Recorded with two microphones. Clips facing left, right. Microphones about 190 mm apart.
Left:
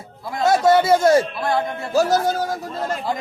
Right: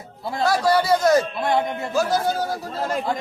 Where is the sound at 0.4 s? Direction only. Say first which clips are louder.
Left 4 dB; 25° left (ahead or behind).